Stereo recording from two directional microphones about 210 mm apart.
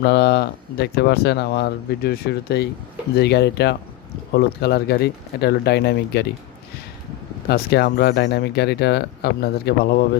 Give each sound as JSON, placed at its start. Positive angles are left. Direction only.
{"t": 0.0, "sound": "speech", "side_deg": 50}
{"t": 7.4, "sound": "speech", "side_deg": 50}